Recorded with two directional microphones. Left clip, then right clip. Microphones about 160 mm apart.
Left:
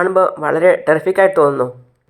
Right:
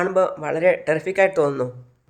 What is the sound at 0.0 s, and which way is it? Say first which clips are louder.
Speech: left 6 dB; 10° left (ahead or behind).